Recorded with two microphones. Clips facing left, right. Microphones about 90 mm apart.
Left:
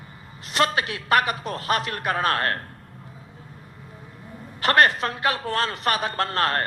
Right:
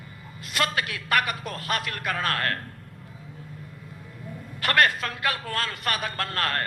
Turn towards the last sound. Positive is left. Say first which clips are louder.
# left 5 dB
turn(degrees=25)  # may be behind; listen again after turning